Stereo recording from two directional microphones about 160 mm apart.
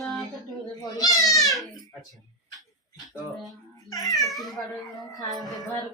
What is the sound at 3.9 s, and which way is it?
Baby cry, 25° left (ahead or behind).